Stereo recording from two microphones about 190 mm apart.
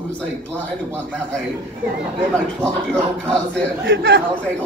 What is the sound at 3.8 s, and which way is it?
Speech, 80° right.